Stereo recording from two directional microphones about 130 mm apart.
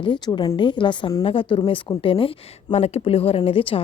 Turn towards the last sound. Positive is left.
turn(degrees=45)  # may be behind; listen again after turning